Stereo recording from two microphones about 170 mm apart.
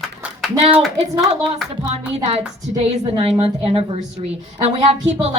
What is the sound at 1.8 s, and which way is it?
A woman's voice, 40° right (ahead or behind).